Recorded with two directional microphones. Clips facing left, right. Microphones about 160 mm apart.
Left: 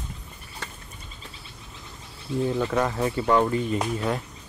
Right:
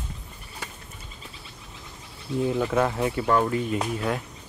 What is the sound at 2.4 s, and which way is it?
Speech, 5° right (ahead or behind).